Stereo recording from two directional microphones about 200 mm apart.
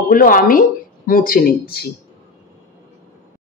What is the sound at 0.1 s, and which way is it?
Speech, 45° left (ahead or behind).